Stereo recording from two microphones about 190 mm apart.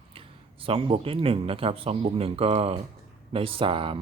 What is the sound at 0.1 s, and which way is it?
Speech, 30° right (ahead or behind).